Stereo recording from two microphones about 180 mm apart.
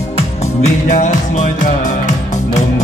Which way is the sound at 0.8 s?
45° left (ahead or behind).